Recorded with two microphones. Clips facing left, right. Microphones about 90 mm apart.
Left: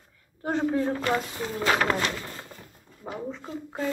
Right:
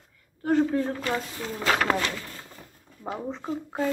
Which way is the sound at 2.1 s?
30° left (ahead or behind).